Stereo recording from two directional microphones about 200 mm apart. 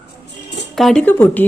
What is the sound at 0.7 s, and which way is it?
Speech, centre (ahead or behind).